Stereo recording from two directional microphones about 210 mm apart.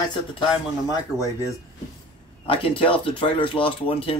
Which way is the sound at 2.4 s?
25° left (ahead or behind).